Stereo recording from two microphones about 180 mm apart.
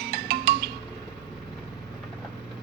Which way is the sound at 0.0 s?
60° right (ahead or behind).